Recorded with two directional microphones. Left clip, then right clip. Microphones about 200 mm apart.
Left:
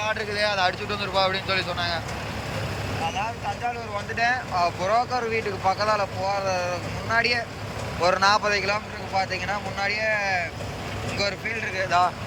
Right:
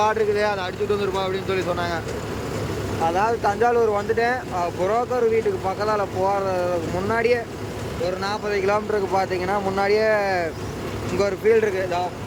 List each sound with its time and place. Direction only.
0.0 s speech: 20° right (ahead or behind)
3.2 s speech: 20° right (ahead or behind)